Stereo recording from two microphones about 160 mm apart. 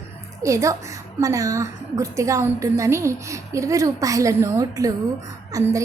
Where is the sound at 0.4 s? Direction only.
20° right (ahead or behind).